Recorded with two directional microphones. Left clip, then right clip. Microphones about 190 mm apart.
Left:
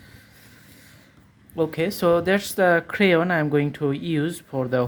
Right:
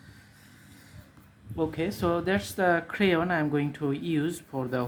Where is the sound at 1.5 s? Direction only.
45° left (ahead or behind).